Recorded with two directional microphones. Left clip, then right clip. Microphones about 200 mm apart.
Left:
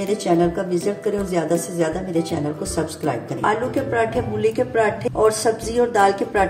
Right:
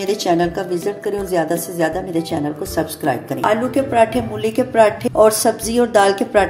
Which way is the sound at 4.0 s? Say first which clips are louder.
Right 6 dB; 50° right (ahead or behind).